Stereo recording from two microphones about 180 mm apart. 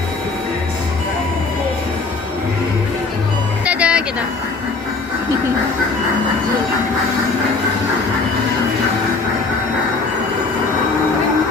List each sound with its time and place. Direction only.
3.7 s music: 5° right (ahead or behind)